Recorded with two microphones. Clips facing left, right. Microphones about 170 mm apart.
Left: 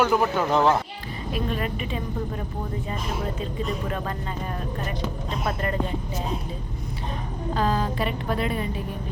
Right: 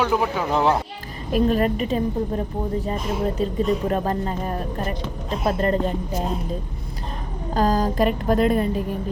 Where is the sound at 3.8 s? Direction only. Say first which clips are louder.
Right 7 dB; 40° right (ahead or behind).